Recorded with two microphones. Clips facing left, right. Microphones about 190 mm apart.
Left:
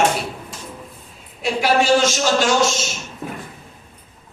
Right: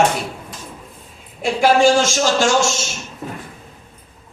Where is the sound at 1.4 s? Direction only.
50° right (ahead or behind).